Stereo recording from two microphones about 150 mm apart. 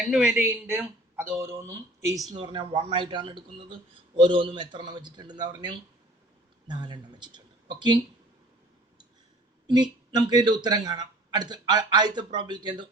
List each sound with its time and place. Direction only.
0.1 s a man's voice: 5° right (ahead or behind)
2.3 s speech: 30° right (ahead or behind)
9.6 s speech: 25° right (ahead or behind)